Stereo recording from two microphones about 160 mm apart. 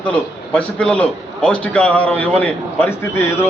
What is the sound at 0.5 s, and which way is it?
A man's voice, 5° left (ahead or behind).